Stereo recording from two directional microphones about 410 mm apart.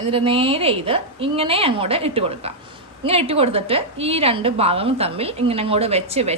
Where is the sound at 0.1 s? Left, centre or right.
Centre.